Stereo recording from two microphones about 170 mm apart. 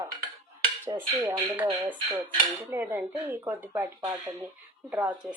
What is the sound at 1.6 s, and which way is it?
Speech, 10° right (ahead or behind).